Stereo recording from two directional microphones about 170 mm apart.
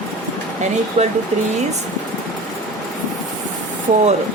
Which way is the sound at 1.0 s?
45° right (ahead or behind).